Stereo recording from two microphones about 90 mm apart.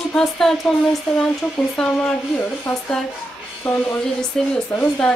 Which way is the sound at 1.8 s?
15° left (ahead or behind).